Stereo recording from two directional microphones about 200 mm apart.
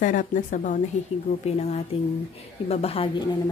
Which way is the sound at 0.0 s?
40° left (ahead or behind).